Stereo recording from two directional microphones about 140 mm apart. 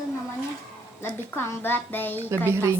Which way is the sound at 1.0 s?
15° left (ahead or behind).